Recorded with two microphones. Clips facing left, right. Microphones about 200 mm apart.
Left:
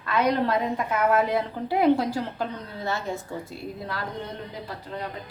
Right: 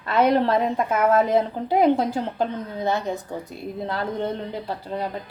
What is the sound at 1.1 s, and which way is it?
A woman's voice, 20° right (ahead or behind).